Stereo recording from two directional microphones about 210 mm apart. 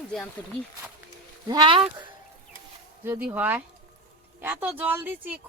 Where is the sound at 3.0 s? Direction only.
10° right (ahead or behind).